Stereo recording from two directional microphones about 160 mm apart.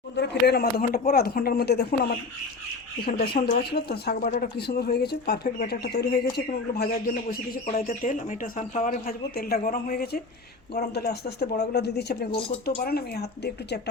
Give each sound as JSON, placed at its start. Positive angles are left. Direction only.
{"t": 0.2, "sound": "speech", "side_deg": 90}
{"t": 3.1, "sound": "speech", "side_deg": 70}
{"t": 7.9, "sound": "speech", "side_deg": 55}
{"t": 10.8, "sound": "speech", "side_deg": 90}
{"t": 12.6, "sound": "speech", "side_deg": 80}